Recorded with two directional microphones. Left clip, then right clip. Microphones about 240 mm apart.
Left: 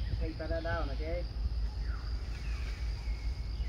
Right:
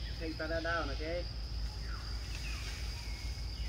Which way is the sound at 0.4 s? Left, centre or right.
Right.